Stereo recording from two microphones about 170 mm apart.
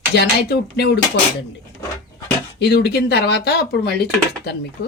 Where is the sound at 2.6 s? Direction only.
75° left (ahead or behind).